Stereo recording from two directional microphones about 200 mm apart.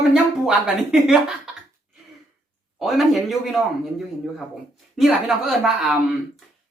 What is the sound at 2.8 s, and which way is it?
A woman's voice, centre (ahead or behind).